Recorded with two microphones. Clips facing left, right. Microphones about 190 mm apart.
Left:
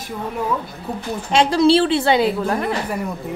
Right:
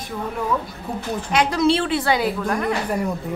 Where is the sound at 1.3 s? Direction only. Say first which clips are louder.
Left 4 dB; 30° left (ahead or behind).